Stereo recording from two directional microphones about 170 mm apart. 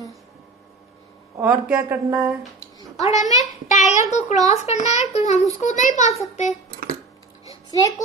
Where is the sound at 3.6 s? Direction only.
45° left (ahead or behind).